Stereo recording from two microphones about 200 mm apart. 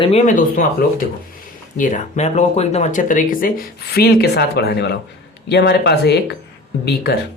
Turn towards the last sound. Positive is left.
turn(degrees=55)  # may be behind; listen again after turning